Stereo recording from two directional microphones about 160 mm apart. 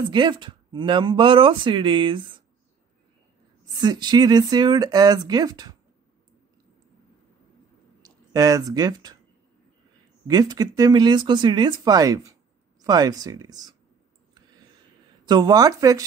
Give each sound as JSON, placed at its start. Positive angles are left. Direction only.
{"t": 0.1, "sound": "speech", "side_deg": -30}
{"t": 3.8, "sound": "speech", "side_deg": -25}
{"t": 8.0, "sound": "speech", "side_deg": -20}
{"t": 10.2, "sound": "speech", "side_deg": -25}
{"t": 15.2, "sound": "speech", "side_deg": -25}